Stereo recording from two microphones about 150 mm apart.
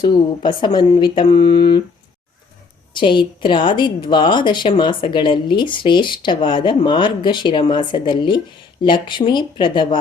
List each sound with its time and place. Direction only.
0.0 s a woman's voice: 30° left (ahead or behind)
2.9 s a woman's voice: 35° left (ahead or behind)